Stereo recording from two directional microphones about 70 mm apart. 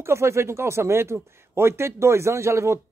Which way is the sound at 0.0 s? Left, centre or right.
Right.